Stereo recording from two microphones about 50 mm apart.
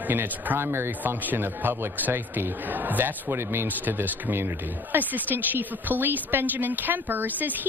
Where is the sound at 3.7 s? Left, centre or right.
Right.